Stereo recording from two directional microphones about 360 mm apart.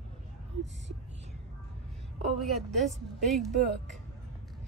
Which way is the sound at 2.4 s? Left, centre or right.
Centre.